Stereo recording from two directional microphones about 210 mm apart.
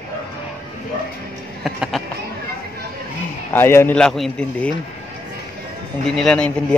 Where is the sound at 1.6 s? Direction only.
Centre (ahead or behind).